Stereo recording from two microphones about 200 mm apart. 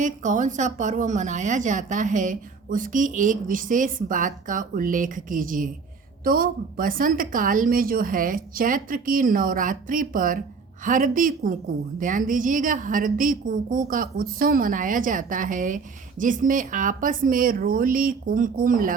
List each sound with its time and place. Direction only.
0.0 s a woman's voice: 40° right (ahead or behind)